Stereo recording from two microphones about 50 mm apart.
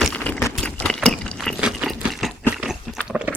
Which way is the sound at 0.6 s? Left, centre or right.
Left.